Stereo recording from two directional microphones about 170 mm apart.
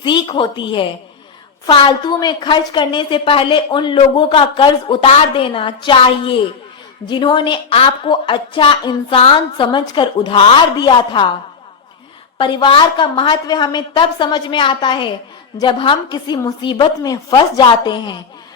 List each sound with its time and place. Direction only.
0.0 s a woman's voice: 30° left (ahead or behind)
12.4 s a woman's voice: 30° left (ahead or behind)